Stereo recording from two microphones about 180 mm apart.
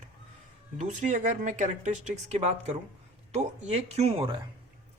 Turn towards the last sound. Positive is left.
turn(degrees=-30)  # may be behind; listen again after turning